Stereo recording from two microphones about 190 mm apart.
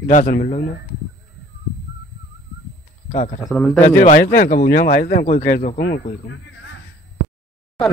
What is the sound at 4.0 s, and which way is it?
Speech, 45° left (ahead or behind).